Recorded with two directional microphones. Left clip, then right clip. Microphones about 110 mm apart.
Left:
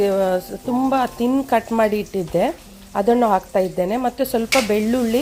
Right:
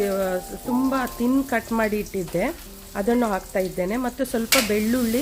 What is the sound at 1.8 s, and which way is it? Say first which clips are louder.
Stir: left 5 dB; 25° left (ahead or behind).